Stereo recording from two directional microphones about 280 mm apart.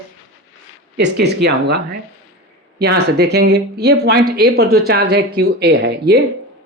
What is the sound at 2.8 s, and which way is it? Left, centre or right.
Speech, right.